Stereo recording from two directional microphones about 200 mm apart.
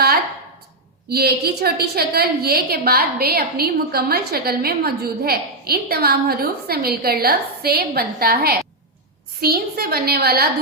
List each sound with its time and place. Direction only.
1.1 s a woman's voice: 50° right (ahead or behind)